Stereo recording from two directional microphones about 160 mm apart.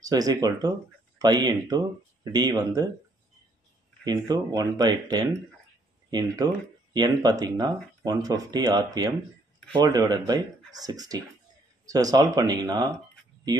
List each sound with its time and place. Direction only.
0.0 s speech: 25° right (ahead or behind)
4.0 s speech: 25° right (ahead or behind)